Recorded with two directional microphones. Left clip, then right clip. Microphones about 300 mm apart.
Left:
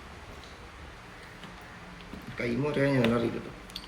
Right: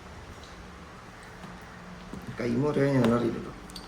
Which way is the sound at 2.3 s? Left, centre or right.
Centre.